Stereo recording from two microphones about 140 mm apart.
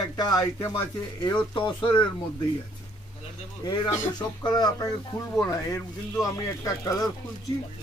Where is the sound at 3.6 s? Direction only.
30° left (ahead or behind).